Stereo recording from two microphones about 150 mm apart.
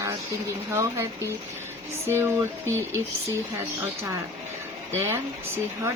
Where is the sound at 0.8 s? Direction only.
20° right (ahead or behind).